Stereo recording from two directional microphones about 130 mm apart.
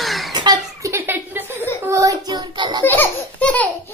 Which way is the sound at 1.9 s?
25° right (ahead or behind).